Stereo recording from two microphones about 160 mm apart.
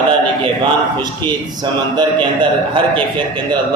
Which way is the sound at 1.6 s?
30° right (ahead or behind).